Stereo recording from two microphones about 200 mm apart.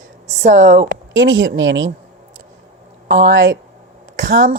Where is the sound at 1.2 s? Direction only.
70° right (ahead or behind).